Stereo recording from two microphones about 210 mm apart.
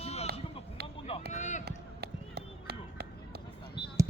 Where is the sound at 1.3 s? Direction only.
35° left (ahead or behind).